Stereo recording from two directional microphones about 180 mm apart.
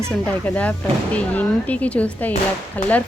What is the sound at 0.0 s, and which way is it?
Speech, 5° left (ahead or behind).